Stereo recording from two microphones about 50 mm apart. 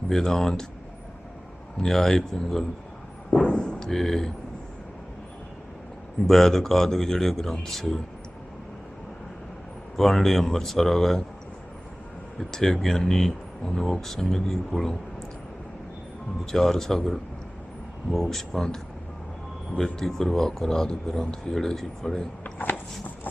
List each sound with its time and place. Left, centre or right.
0.1 s a man's voice: centre
1.8 s a man's voice: centre
3.2 s a sound: centre
3.9 s speech: centre
6.2 s a man's voice: centre
10.0 s speech: centre
12.4 s a man's voice: centre
16.5 s a man's voice: centre
19.8 s a man's voice: centre
22.5 s a sound: left